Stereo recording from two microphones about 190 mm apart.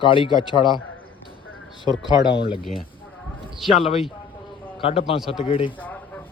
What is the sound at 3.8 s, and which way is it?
Speech, 30° left (ahead or behind).